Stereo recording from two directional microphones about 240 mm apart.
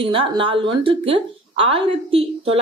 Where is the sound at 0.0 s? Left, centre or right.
Right.